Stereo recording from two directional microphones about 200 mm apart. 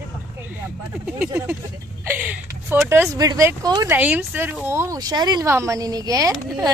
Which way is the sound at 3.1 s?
20° right (ahead or behind).